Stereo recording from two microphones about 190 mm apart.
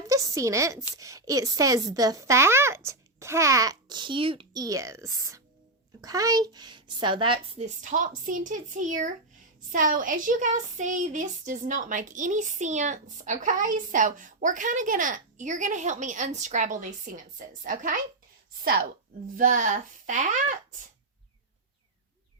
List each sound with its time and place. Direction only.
0.1 s a woman's voice: 15° right (ahead or behind)
7.8 s a woman's voice: 40° right (ahead or behind)
19.4 s speech: 45° right (ahead or behind)